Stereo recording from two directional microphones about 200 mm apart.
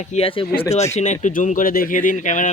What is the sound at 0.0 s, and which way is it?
Speech, 30° left (ahead or behind).